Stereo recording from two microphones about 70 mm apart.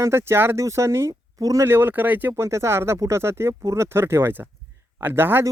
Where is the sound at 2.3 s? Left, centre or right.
Right.